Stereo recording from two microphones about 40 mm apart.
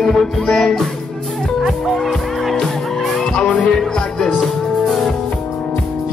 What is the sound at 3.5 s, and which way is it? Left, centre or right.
Music, centre.